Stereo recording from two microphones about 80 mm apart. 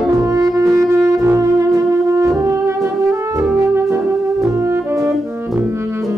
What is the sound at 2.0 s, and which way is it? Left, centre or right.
Brass instrument, right.